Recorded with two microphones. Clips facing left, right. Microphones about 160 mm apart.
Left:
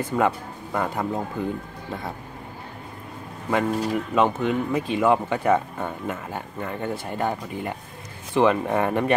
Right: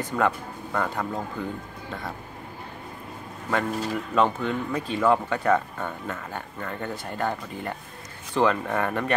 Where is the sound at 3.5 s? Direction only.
10° left (ahead or behind).